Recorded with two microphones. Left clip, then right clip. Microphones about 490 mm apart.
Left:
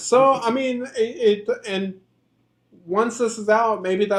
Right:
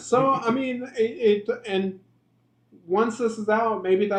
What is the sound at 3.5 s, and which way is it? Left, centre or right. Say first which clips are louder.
Speech: left 3 dB; left.